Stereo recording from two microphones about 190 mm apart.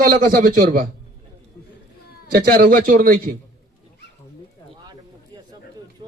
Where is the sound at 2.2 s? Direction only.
50° right (ahead or behind).